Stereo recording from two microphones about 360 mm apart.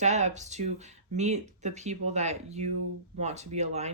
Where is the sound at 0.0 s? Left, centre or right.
Centre.